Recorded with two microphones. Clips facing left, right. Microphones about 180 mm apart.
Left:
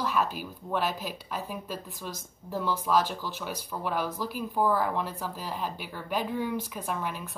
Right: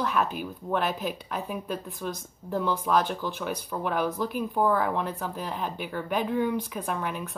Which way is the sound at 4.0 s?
55° right (ahead or behind).